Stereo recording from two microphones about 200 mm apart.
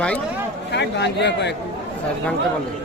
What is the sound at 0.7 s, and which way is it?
Speech, 60° left (ahead or behind).